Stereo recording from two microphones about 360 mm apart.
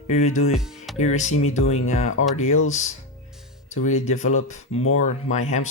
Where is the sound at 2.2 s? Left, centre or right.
Left.